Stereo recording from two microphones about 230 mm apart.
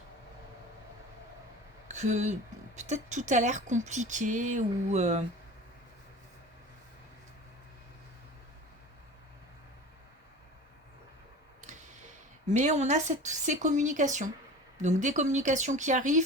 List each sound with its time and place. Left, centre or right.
1.9 s speech: right
12.5 s speech: right